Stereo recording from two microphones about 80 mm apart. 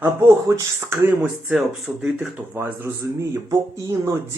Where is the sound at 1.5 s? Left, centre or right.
Centre.